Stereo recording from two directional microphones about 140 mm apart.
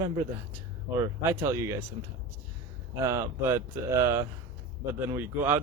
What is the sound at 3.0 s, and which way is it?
Speech, 20° right (ahead or behind).